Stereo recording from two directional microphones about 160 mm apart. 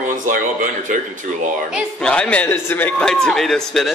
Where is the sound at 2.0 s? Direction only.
5° left (ahead or behind).